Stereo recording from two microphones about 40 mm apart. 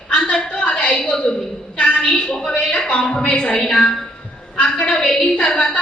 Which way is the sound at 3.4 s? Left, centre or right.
Centre.